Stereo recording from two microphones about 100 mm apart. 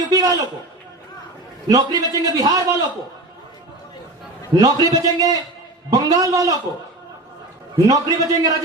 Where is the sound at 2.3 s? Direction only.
40° right (ahead or behind).